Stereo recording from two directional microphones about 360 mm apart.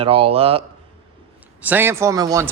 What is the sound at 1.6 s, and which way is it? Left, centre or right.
Speech, centre.